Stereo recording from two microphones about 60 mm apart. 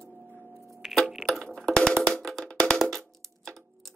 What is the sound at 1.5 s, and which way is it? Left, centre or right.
Music, centre.